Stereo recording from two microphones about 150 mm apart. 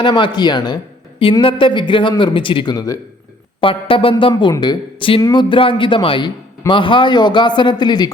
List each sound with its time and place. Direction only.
0.0 s speech: 30° left (ahead or behind)
3.6 s speech: 35° left (ahead or behind)